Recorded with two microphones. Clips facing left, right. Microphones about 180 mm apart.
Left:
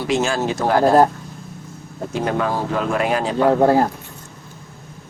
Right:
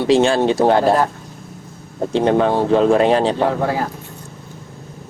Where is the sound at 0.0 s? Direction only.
30° right (ahead or behind).